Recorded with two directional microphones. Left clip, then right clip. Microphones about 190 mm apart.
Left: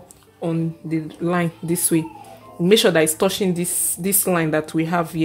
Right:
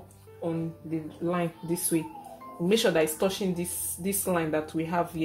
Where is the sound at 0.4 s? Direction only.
55° left (ahead or behind).